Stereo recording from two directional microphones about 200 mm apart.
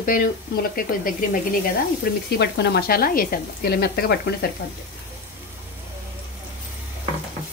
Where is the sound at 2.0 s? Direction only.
55° left (ahead or behind).